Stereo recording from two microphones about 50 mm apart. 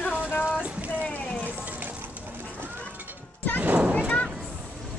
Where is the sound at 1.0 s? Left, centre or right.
Left.